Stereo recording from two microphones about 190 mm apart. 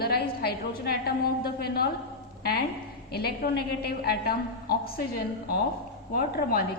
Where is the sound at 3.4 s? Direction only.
50° left (ahead or behind).